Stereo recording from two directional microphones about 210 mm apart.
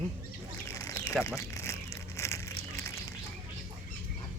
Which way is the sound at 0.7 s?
15° left (ahead or behind).